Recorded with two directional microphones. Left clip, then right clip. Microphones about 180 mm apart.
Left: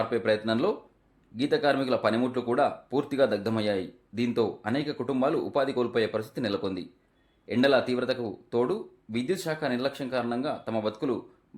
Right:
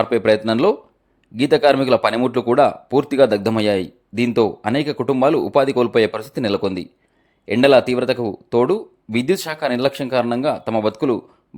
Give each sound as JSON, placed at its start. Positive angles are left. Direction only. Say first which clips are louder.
{"t": 0.0, "sound": "speech", "louder": "right 10 dB", "side_deg": -45}